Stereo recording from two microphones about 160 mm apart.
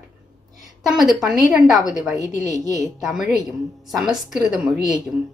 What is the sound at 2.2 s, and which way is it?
Speech, 50° left (ahead or behind).